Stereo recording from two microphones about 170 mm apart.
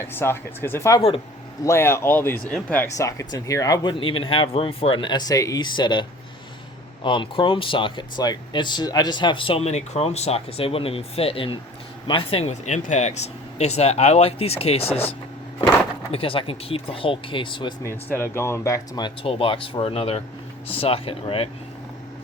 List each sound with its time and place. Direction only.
0.1 s speech: 15° left (ahead or behind); by 15.1 s 35° left (ahead or behind)
16.1 s speech: 30° left (ahead or behind)
17.8 s speech: 15° left (ahead or behind); by 21.5 s 35° left (ahead or behind)